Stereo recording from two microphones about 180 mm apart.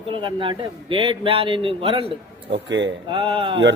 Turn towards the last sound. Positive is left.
turn(degrees=-30)  # may be behind; listen again after turning